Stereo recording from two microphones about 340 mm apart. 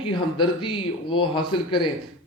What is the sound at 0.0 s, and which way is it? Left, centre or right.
Speech, centre.